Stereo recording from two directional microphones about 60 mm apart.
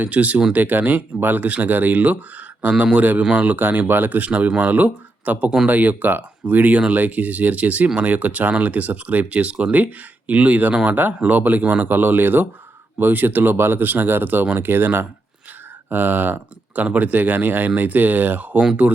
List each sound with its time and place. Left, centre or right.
0.0 s speech: right